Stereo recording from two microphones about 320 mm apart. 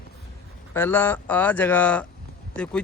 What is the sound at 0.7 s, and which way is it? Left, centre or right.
Speech, centre.